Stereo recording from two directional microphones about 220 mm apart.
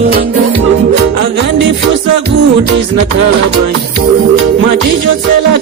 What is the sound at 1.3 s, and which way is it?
Music, 55° right (ahead or behind).